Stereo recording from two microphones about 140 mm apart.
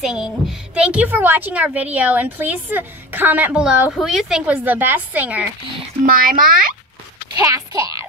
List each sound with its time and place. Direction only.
0.0 s a woman's voice: 5° right (ahead or behind)
6.0 s a child's voice: 90° right
7.3 s speech: 25° right (ahead or behind)